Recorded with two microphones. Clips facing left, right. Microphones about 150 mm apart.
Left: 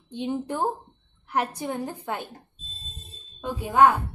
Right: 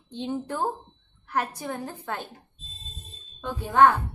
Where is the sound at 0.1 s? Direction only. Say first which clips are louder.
Left 2 dB; 15° left (ahead or behind).